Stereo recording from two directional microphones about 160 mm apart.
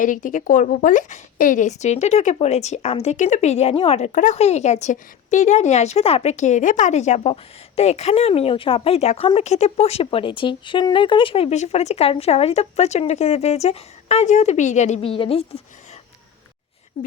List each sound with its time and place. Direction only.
0.0 s a woman's voice: 55° left (ahead or behind); by 15.4 s 35° left (ahead or behind)